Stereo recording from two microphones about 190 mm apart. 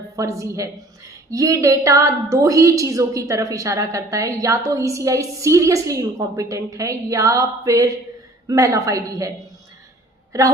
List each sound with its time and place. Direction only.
0.2 s a woman's voice: 15° right (ahead or behind)